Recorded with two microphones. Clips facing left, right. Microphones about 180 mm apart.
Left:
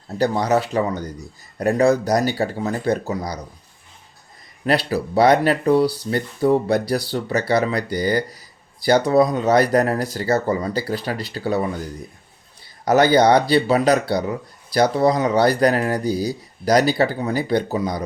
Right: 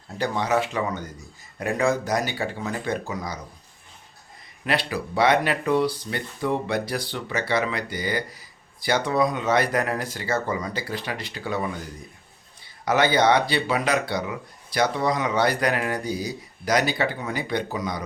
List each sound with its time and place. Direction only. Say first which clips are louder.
0.2 s speech: left 5 dB; 40° left (ahead or behind)
4.6 s speech: left 6 dB; 40° left (ahead or behind)
12.8 s speech: left 5 dB; 40° left (ahead or behind)